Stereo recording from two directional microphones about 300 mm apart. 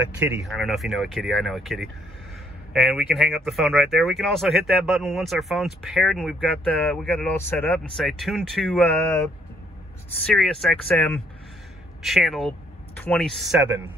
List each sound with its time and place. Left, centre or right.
0.5 s speech: centre
10.2 s speech: centre